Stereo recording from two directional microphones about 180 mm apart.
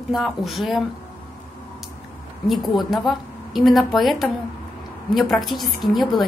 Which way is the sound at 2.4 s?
Centre (ahead or behind).